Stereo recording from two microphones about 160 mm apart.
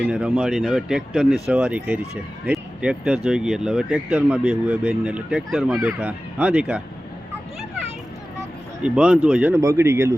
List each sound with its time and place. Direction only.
0.0 s speech: 5° right (ahead or behind)
8.8 s speech: 5° right (ahead or behind)